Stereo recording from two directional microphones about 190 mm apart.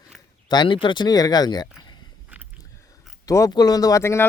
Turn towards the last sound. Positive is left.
turn(degrees=15)  # may be behind; listen again after turning